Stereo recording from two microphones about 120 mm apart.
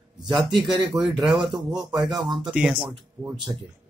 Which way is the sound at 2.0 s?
35° right (ahead or behind).